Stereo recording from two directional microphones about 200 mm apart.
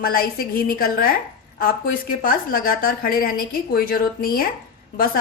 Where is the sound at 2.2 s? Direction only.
45° left (ahead or behind).